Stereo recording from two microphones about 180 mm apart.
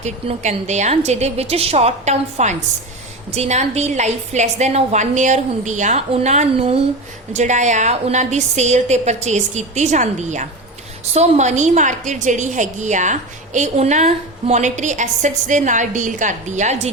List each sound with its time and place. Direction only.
0.0 s a woman's voice: 40° right (ahead or behind)